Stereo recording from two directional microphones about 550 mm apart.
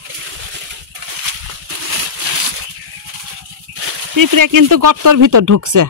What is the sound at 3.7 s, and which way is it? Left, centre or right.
Speech, right.